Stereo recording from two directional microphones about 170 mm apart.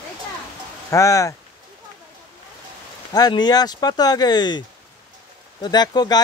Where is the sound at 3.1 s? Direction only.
25° left (ahead or behind).